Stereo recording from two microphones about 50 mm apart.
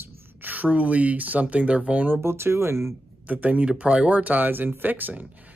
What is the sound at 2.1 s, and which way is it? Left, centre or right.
Speech, right.